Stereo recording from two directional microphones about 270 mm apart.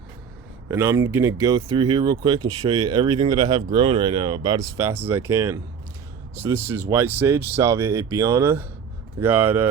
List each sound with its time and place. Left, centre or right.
0.7 s speech: centre
6.7 s speech: centre